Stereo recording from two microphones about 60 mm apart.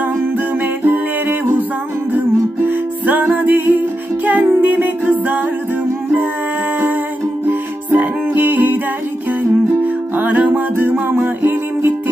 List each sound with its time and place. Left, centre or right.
0.6 s music: right
7.4 s music: right
9.8 s music: right